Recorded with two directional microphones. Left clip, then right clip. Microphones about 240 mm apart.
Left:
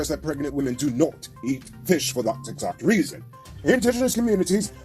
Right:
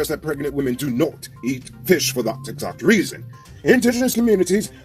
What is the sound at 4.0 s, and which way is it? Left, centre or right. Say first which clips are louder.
Speech: right 4 dB; centre.